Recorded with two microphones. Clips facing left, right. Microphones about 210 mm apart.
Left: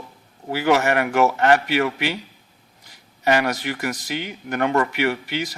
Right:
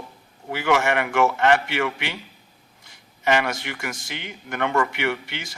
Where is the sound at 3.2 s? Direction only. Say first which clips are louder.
Left 2 dB; 35° left (ahead or behind).